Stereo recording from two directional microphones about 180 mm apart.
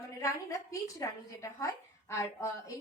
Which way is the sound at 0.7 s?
20° left (ahead or behind).